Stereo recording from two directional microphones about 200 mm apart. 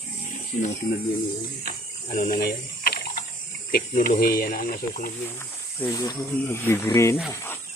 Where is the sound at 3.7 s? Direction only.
45° left (ahead or behind).